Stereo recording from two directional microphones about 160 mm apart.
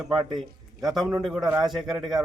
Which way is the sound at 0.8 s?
25° right (ahead or behind).